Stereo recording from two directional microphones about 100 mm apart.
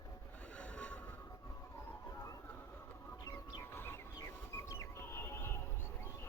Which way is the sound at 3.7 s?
20° left (ahead or behind).